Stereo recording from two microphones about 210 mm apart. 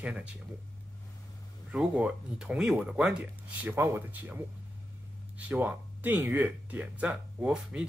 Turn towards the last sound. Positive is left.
turn(degrees=-5)  # may be behind; listen again after turning